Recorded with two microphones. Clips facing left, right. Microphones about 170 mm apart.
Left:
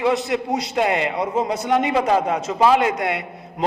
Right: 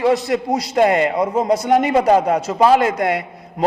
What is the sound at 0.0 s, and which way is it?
A man's voice, 40° right (ahead or behind).